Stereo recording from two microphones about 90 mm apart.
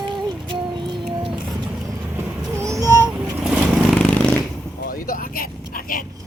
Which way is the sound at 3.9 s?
15° left (ahead or behind).